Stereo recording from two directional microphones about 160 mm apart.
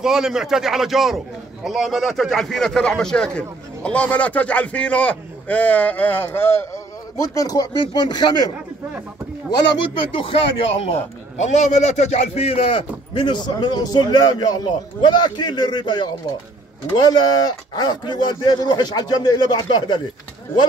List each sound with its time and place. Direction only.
0.0 s a man's voice: 5° right (ahead or behind); by 8.5 s 25° left (ahead or behind)
9.6 s speech: 30° left (ahead or behind)
11.4 s a man's voice: 45° left (ahead or behind); by 20.0 s 25° left (ahead or behind)